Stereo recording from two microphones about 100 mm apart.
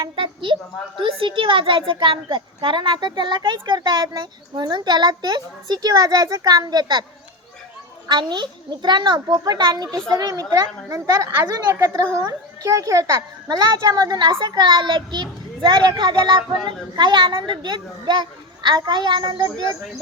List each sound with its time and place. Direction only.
0.0 s a woman's voice: 55° right (ahead or behind)
8.0 s a child's voice: 50° right (ahead or behind)
14.3 s a woman's voice: 60° right (ahead or behind)
14.5 s a child's voice: 50° right (ahead or behind)